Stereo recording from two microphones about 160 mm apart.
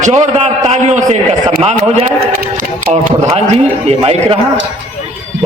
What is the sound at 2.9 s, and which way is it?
A man's voice, 45° right (ahead or behind).